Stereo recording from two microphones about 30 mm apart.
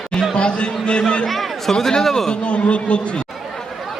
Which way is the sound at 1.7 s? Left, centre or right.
Left.